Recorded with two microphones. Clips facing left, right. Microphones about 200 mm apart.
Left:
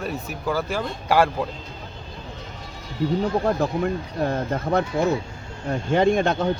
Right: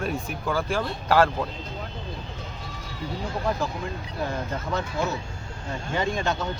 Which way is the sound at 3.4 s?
55° left (ahead or behind).